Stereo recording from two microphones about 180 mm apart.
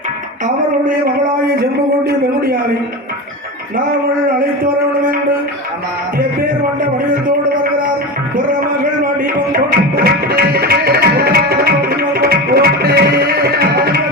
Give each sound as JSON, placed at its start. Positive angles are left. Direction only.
{"t": 2.0, "sound": "a man's voice", "side_deg": -55}
{"t": 9.0, "sound": "tabla", "side_deg": -50}